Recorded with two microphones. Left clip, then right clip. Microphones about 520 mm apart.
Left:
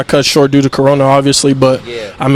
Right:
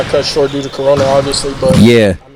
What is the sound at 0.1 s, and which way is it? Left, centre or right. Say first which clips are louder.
Speech: left 7 dB; left.